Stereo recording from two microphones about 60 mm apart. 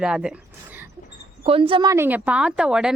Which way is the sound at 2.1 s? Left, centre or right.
Right.